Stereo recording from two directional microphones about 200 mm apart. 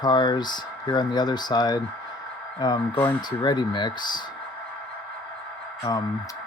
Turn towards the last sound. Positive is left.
turn(degrees=15)  # may be behind; listen again after turning